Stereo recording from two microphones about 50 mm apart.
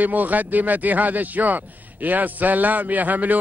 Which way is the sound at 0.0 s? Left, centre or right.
Right.